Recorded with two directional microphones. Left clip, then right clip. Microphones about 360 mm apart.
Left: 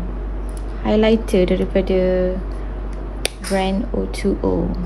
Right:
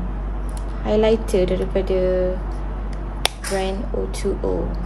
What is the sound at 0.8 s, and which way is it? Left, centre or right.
Speech, centre.